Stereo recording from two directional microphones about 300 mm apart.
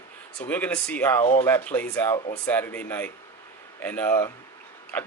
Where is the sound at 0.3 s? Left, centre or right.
Centre.